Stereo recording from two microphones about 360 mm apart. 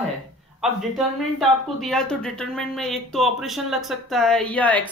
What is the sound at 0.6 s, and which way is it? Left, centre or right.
Speech, centre.